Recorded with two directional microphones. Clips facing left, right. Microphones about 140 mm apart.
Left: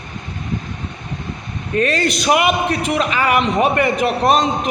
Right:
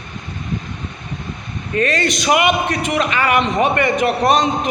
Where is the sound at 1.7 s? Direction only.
5° left (ahead or behind).